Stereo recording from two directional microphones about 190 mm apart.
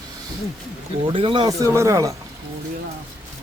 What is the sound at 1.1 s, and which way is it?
Speech, 30° right (ahead or behind).